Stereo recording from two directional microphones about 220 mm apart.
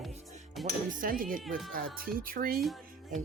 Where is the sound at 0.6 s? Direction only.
35° right (ahead or behind).